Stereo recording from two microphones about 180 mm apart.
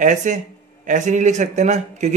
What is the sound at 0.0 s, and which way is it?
A man's voice, 40° right (ahead or behind).